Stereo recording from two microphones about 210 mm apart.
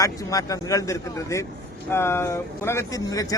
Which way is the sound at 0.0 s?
15° left (ahead or behind).